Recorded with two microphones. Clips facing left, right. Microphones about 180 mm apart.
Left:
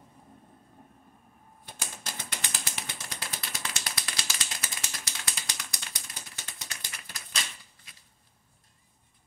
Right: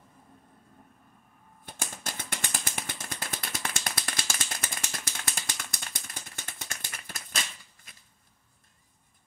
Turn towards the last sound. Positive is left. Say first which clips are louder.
# right 3 dB
turn(degrees=-50)  # may be behind; listen again after turning